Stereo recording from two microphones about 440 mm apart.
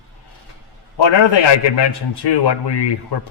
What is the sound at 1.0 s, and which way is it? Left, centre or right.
A man's voice, left.